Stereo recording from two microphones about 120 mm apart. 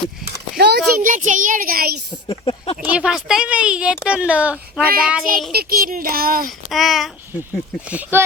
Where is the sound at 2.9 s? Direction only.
5° right (ahead or behind).